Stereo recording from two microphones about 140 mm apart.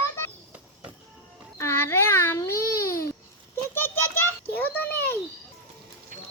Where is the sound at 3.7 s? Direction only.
15° left (ahead or behind).